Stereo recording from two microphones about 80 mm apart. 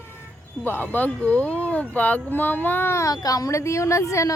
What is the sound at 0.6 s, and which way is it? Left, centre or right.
Speech, left.